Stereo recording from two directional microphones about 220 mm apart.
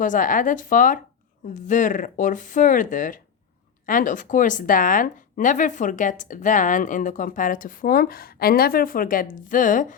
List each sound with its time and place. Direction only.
0.0 s a woman's voice: 35° left (ahead or behind)